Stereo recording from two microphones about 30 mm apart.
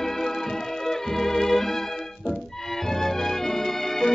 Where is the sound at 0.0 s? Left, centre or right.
Centre.